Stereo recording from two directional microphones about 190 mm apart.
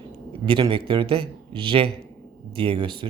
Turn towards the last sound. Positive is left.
turn(degrees=-25)  # may be behind; listen again after turning